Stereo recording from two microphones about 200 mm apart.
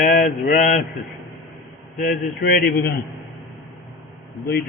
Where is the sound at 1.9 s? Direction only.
45° left (ahead or behind).